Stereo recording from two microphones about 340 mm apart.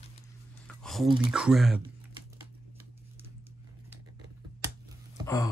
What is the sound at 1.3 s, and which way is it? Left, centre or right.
Speech, centre.